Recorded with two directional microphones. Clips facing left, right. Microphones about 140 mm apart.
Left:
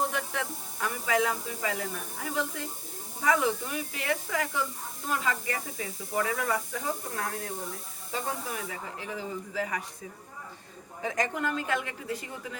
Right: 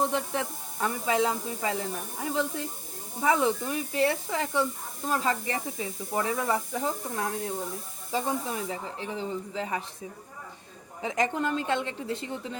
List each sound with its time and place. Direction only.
0.1 s speech: 30° right (ahead or behind)
11.0 s speech: 20° right (ahead or behind)